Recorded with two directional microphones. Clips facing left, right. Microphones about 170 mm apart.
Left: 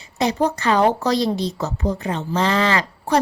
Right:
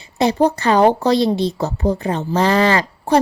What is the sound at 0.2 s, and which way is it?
Speech, 30° right (ahead or behind).